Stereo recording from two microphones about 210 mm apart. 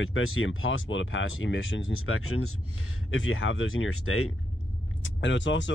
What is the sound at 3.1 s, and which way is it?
Speech, 70° left (ahead or behind).